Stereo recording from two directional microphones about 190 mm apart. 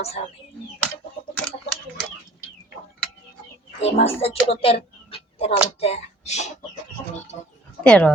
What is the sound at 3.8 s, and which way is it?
Speech, 35° left (ahead or behind).